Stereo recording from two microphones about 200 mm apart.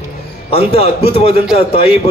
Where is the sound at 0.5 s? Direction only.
30° left (ahead or behind).